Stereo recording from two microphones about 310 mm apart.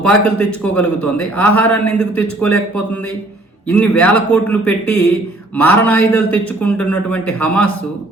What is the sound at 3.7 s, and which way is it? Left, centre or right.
A man's voice, centre.